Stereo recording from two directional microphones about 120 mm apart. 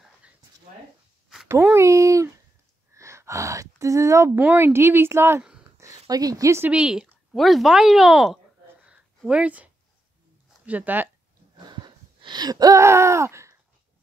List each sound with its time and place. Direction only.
1.5 s a woman's voice: 20° right (ahead or behind)
2.9 s a sound: 25° right (ahead or behind)
4.4 s a woman's voice: 15° right (ahead or behind)
6.0 s speech: 30° right (ahead or behind)
6.7 s speech: 10° right (ahead or behind)
11.5 s a sound: 40° right (ahead or behind); by 13.6 s 25° right (ahead or behind)